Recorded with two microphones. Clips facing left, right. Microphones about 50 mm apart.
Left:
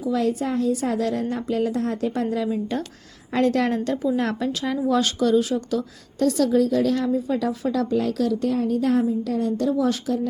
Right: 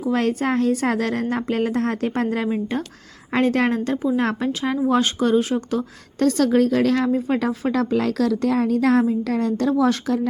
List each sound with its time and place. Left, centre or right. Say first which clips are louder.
0.0 s a woman's voice: right 2 dB; right
6.1 s a woman's voice: right 2 dB; right
7.9 s a woman's voice: right 2 dB; right
8.4 s a woman's voice: right 3 dB; right